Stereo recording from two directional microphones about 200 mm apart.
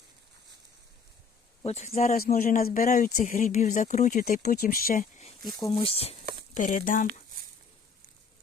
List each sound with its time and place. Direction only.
1.6 s speech: 30° left (ahead or behind)
5.4 s speech: 20° left (ahead or behind)
6.5 s speech: 40° left (ahead or behind)